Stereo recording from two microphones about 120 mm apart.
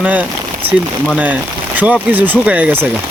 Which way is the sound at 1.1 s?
15° right (ahead or behind).